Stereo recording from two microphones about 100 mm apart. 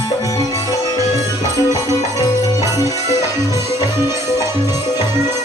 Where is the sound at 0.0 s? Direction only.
40° left (ahead or behind).